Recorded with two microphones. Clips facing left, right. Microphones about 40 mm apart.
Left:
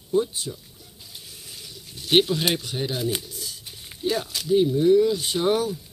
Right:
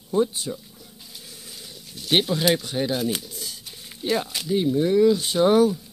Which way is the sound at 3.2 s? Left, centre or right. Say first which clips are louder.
Right 1 dB; right.